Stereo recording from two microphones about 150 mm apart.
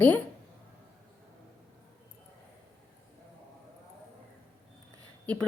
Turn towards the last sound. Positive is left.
turn(degrees=10)  # may be behind; listen again after turning